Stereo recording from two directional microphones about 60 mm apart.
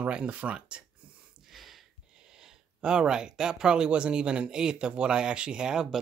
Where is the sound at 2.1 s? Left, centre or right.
Centre.